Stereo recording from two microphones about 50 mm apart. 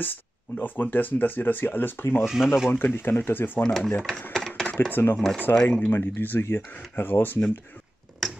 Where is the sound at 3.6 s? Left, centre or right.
Centre.